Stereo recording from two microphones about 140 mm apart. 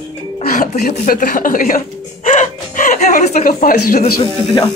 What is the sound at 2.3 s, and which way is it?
Music, 65° left (ahead or behind).